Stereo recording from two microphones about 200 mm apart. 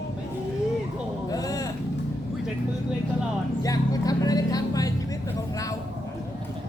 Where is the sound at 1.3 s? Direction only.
15° left (ahead or behind).